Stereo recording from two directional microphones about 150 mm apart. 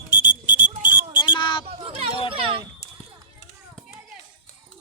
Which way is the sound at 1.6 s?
40° right (ahead or behind).